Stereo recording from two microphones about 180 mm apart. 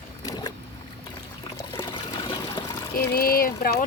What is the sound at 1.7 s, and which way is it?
Water, 15° left (ahead or behind).